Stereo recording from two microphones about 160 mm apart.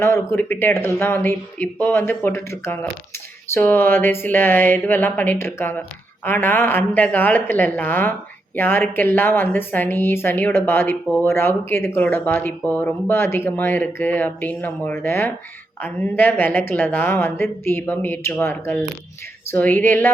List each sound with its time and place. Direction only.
0.0 s speech: 15° left (ahead or behind)